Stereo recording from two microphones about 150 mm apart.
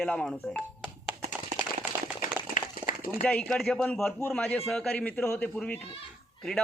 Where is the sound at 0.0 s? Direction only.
5° left (ahead or behind).